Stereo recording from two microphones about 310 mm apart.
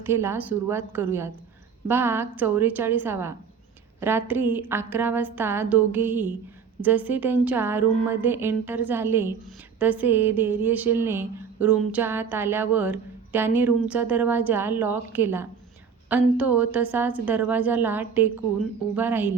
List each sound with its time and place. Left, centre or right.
0.0 s a woman's voice: centre